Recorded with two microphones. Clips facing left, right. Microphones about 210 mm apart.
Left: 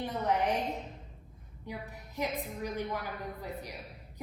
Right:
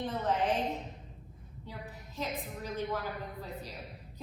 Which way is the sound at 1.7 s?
15° left (ahead or behind).